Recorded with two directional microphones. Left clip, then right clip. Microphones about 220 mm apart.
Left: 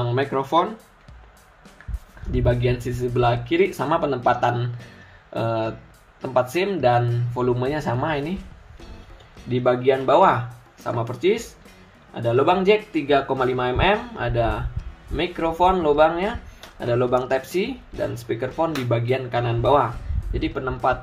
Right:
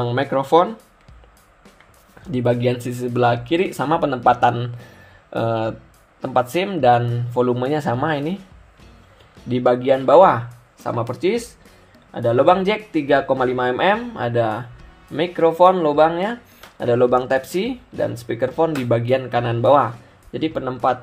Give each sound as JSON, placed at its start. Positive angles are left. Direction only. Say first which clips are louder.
{"t": 0.0, "sound": "speech", "louder": "right 3 dB", "side_deg": -40}
{"t": 2.3, "sound": "speech", "louder": "right 3 dB", "side_deg": -45}
{"t": 9.5, "sound": "speech", "louder": "right 3 dB", "side_deg": -40}